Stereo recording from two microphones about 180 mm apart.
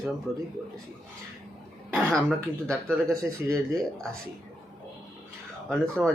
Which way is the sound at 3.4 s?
15° right (ahead or behind).